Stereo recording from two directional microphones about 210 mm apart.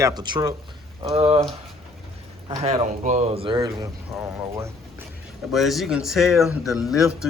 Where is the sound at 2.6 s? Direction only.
30° right (ahead or behind); by 4.7 s 15° right (ahead or behind).